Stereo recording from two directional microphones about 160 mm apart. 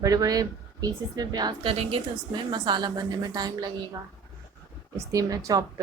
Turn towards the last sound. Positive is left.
turn(degrees=-25)  # may be behind; listen again after turning